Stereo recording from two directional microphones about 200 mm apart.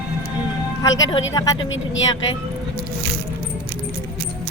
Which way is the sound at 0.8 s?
20° left (ahead or behind).